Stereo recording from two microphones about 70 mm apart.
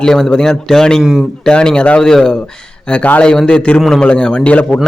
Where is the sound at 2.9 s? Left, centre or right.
Centre.